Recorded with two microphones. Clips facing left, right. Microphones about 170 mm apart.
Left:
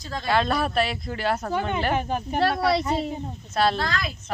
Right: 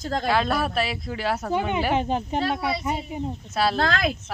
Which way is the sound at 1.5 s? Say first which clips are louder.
Right 1 dB; 15° right (ahead or behind).